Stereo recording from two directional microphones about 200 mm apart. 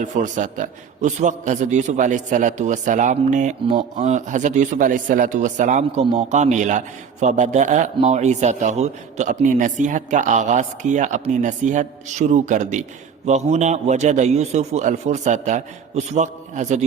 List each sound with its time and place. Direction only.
0.0 s speech: 40° right (ahead or behind)